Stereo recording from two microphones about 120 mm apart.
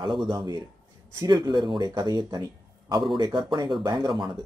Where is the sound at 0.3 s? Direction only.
40° right (ahead or behind).